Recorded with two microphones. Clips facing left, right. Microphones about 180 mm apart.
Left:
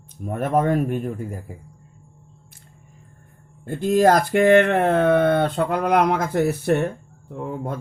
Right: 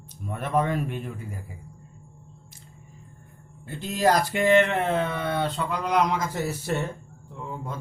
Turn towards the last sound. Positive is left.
turn(degrees=55)  # may be behind; listen again after turning